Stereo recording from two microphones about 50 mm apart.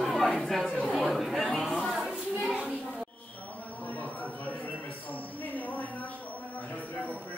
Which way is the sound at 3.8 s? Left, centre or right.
Left.